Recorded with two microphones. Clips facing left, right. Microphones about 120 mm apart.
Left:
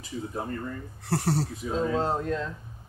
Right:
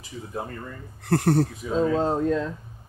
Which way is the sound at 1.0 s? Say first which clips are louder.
Right 7 dB; 55° right (ahead or behind).